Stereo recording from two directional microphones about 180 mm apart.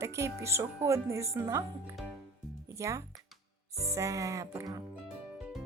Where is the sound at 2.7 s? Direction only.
15° right (ahead or behind).